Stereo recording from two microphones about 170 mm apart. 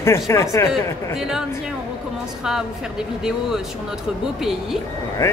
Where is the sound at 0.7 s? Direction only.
5° right (ahead or behind).